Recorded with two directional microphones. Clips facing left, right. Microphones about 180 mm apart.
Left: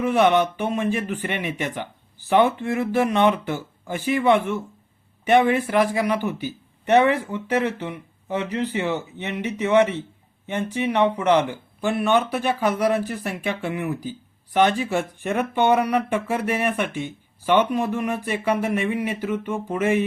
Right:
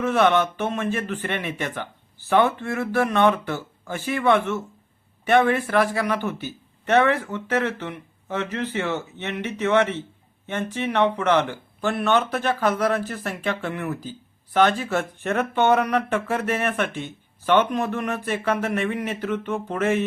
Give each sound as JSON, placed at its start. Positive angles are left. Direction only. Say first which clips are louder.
{"t": 0.0, "sound": "speech", "louder": "left 1 dB", "side_deg": 15}